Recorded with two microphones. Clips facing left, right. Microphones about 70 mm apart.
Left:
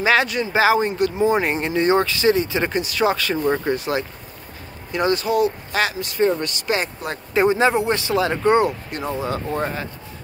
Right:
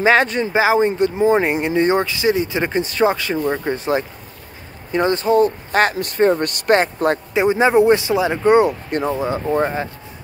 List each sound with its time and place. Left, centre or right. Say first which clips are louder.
0.0 s speech: right 3 dB; right
0.6 s speech: right 2 dB; right
2.8 s speech: right 6 dB; right
7.4 s speech: right 5 dB; right